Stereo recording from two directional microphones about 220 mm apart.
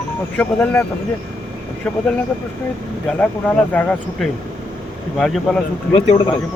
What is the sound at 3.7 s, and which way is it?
Speech, 5° left (ahead or behind).